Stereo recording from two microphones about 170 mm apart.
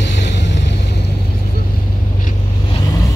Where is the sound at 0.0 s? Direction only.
90° left.